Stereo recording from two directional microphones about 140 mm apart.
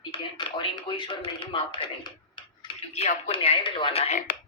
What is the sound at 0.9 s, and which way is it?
Speech, 40° left (ahead or behind).